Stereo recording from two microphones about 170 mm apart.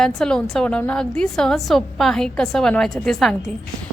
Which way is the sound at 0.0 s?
5° left (ahead or behind).